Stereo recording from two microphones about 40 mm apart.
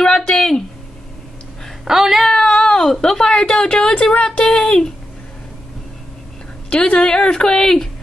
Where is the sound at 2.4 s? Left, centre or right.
Left.